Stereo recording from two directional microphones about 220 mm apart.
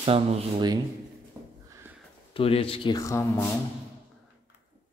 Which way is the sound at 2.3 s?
25° left (ahead or behind).